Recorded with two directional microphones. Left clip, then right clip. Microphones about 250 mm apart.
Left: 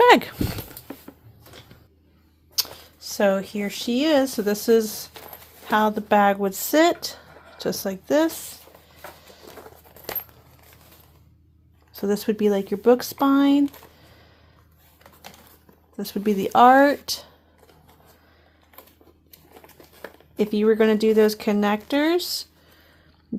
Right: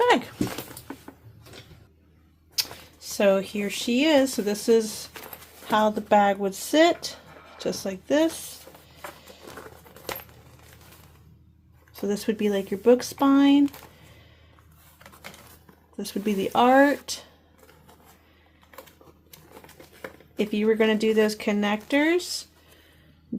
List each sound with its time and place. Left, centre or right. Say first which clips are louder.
0.0 s speech: left 6 dB; left
2.6 s speech: left 2 dB; centre
11.9 s speech: left 3 dB; centre
16.0 s speech: left 3 dB; centre
19.3 s crumpling: even; centre
20.4 s speech: left 3 dB; centre